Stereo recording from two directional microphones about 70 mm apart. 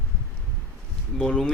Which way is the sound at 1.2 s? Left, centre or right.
Centre.